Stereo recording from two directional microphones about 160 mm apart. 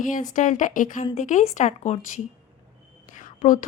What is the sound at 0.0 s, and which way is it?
A woman's voice, 55° left (ahead or behind).